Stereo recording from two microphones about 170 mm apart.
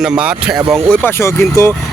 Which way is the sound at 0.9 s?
15° left (ahead or behind).